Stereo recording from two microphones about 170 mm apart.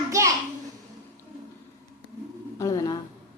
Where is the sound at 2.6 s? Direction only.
20° left (ahead or behind).